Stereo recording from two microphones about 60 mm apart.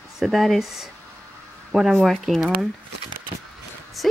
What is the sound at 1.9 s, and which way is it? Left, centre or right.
Speech, centre.